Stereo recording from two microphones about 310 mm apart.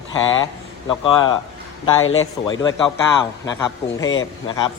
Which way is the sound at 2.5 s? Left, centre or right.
Centre.